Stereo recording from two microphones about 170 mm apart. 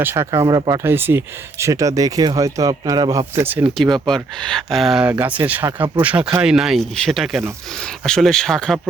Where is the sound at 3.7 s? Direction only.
Centre (ahead or behind).